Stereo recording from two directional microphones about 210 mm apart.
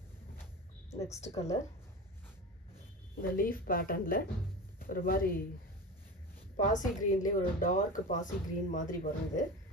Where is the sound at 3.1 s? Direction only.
45° left (ahead or behind).